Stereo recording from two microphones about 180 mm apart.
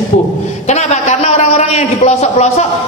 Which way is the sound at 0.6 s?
40° left (ahead or behind).